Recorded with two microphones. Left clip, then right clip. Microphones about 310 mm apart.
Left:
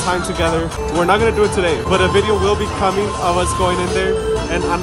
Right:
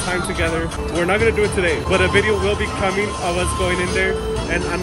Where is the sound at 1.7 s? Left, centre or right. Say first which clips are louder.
Left 2 dB; left.